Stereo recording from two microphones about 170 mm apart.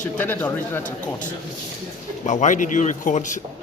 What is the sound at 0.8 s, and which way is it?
A man's voice, 50° left (ahead or behind).